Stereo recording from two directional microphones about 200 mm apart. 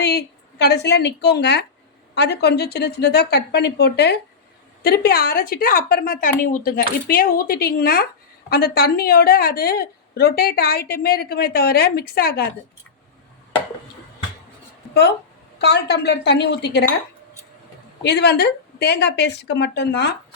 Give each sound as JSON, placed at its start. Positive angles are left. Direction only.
{"t": 0.0, "sound": "a woman's voice", "side_deg": 55}
{"t": 15.5, "sound": "a woman's voice", "side_deg": 55}
{"t": 18.0, "sound": "a woman's voice", "side_deg": 55}